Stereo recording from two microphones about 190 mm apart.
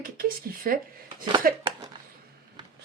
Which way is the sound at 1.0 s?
25° right (ahead or behind).